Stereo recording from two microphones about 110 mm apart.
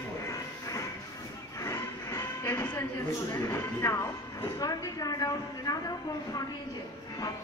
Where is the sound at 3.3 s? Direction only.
30° left (ahead or behind).